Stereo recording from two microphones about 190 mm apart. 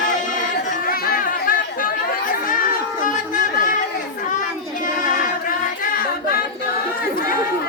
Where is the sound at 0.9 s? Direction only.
50° left (ahead or behind).